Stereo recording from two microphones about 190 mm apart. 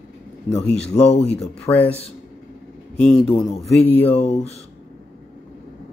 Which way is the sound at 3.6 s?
10° left (ahead or behind).